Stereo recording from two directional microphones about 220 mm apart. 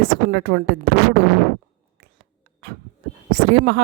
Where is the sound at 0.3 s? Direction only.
50° right (ahead or behind).